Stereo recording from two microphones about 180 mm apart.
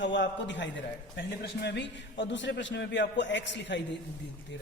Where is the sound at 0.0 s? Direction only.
85° left.